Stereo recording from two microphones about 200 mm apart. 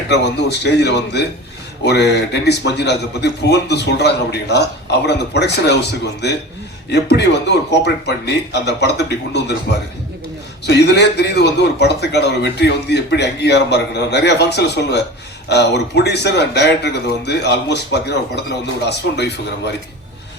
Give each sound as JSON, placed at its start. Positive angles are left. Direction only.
{"t": 0.1, "sound": "a man's voice", "side_deg": 55}
{"t": 10.7, "sound": "a man's voice", "side_deg": 60}